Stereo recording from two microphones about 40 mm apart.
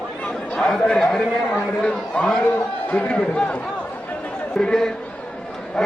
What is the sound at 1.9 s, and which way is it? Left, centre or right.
Speech, left.